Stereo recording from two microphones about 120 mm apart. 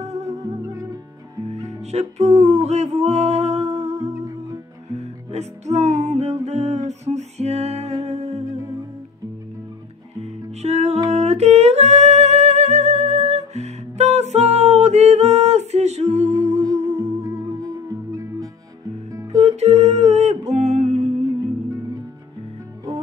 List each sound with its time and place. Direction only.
0.0 s music: 65° right (ahead or behind)
0.3 s music: 25° right (ahead or behind)
1.7 s music: 65° right (ahead or behind)
4.1 s music: 30° right (ahead or behind)
4.9 s music: 65° right (ahead or behind)
10.2 s music: 65° right (ahead or behind)
11.1 s humming: 60° right (ahead or behind)
16.6 s music: 30° right (ahead or behind)
19.4 s humming: 65° right (ahead or behind)